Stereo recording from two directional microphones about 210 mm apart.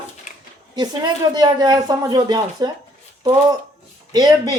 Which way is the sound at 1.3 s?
20° right (ahead or behind).